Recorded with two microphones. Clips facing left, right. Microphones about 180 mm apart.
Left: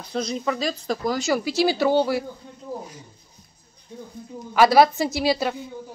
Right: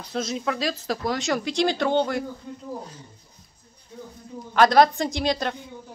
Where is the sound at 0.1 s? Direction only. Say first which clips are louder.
Left 2 dB; centre (ahead or behind).